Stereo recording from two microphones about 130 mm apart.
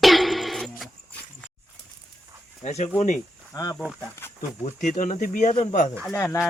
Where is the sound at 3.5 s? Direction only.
25° left (ahead or behind).